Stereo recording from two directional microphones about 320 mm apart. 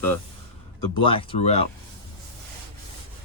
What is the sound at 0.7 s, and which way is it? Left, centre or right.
Speech, left.